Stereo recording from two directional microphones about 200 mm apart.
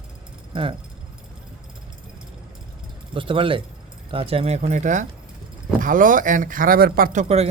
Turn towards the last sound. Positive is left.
turn(degrees=-35)  # may be behind; listen again after turning